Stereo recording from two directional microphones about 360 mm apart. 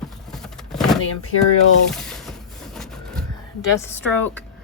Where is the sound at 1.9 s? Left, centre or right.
Centre.